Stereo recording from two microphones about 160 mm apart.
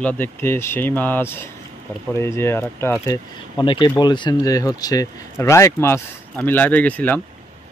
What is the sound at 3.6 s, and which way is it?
A man's voice, 30° left (ahead or behind).